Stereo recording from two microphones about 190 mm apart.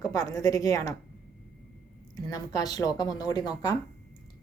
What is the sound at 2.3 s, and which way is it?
Speech, 20° left (ahead or behind).